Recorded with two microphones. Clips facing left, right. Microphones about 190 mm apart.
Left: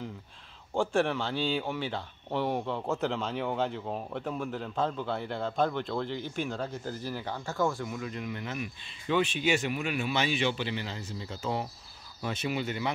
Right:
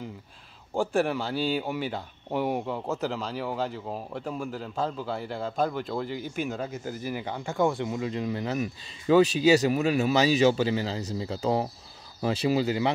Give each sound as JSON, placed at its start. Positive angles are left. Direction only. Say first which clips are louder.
{"t": 0.7, "sound": "a man's voice", "louder": "right 2 dB", "side_deg": -10}